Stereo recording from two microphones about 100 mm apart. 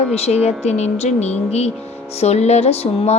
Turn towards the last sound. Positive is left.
turn(degrees=90)